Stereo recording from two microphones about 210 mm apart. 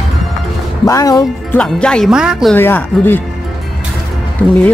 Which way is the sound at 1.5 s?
5° left (ahead or behind).